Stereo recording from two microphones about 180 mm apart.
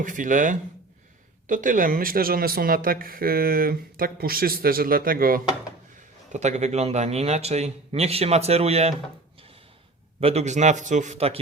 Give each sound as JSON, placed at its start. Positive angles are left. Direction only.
{"t": 0.0, "sound": "speech", "side_deg": -45}
{"t": 6.3, "sound": "a man's voice", "side_deg": -40}
{"t": 10.2, "sound": "a man's voice", "side_deg": -35}